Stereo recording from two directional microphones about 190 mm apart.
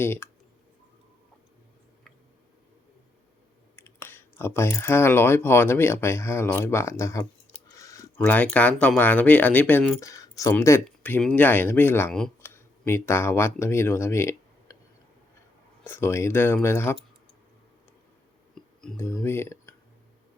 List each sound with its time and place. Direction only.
0.0 s speech: 10° left (ahead or behind)
3.8 s speech: 10° left (ahead or behind)
15.8 s speech: 10° left (ahead or behind)
18.8 s speech: 5° left (ahead or behind)